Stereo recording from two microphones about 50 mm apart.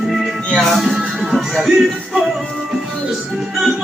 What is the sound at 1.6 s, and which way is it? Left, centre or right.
Music, centre.